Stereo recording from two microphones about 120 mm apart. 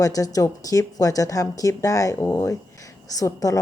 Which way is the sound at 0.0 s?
30° left (ahead or behind).